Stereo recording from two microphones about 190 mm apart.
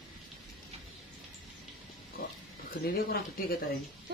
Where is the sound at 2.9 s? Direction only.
50° left (ahead or behind).